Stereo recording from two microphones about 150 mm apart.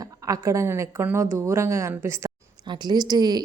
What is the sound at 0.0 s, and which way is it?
A woman's voice, 20° right (ahead or behind).